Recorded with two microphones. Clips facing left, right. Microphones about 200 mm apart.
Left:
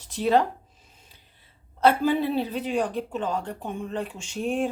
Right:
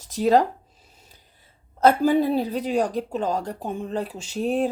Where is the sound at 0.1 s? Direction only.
40° right (ahead or behind).